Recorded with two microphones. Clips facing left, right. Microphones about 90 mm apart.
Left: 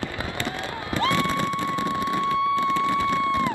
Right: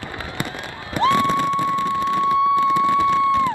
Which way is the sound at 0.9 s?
20° right (ahead or behind).